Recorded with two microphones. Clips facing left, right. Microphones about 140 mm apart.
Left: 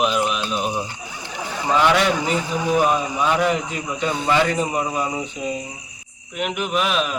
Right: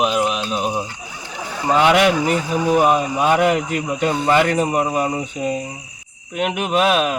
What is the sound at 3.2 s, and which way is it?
Speech, 55° right (ahead or behind).